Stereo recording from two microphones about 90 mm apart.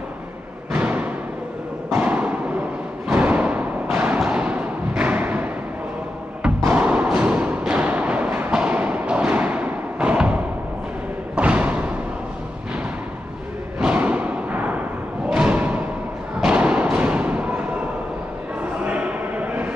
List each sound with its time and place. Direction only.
0.7 s a sound: 15° right (ahead or behind)
6.6 s music: 15° right (ahead or behind)
11.3 s thump: 15° right (ahead or behind)
13.7 s thump: 15° right (ahead or behind)
15.3 s music: 15° right (ahead or behind)
16.3 s thump: 15° right (ahead or behind)
18.6 s a sound: 15° right (ahead or behind)